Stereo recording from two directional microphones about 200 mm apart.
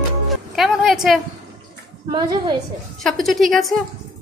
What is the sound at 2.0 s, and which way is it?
Speech, 25° right (ahead or behind).